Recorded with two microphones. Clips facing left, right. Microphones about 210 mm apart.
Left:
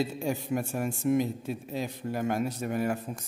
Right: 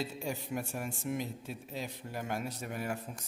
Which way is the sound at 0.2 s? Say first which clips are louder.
Left 7 dB; 50° left (ahead or behind).